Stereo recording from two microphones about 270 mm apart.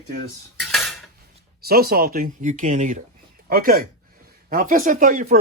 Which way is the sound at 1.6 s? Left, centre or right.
Right.